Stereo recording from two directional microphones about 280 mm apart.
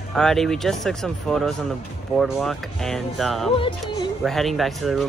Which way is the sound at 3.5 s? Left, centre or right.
Centre.